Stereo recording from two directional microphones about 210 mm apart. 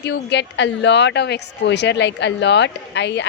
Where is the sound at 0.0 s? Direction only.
55° left (ahead or behind).